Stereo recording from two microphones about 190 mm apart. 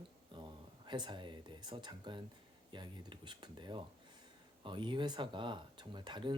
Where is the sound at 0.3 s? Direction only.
25° right (ahead or behind).